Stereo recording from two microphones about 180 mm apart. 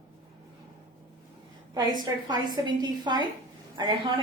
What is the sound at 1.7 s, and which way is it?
A woman's voice, 20° right (ahead or behind).